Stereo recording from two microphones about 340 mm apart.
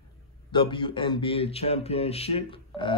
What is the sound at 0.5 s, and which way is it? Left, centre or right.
Speech, centre.